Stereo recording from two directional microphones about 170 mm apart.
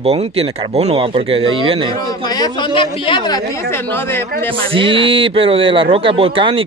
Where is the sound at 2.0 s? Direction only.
20° left (ahead or behind).